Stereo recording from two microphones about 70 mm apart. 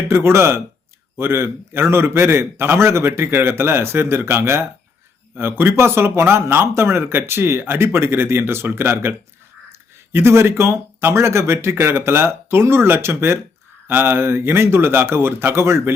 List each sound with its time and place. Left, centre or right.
0.1 s speech: right